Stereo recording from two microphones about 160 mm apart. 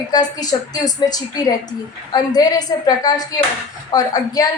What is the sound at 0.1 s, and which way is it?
Speech, 25° left (ahead or behind).